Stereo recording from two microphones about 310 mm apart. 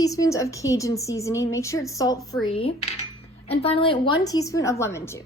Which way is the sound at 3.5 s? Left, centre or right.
Centre.